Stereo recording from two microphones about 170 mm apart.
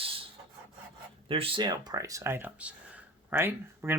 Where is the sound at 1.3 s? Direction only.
35° right (ahead or behind).